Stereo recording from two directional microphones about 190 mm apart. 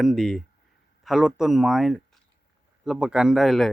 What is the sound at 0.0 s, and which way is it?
Speech, centre (ahead or behind).